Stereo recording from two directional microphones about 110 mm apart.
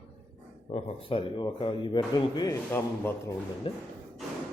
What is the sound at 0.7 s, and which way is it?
Speech, 65° left (ahead or behind).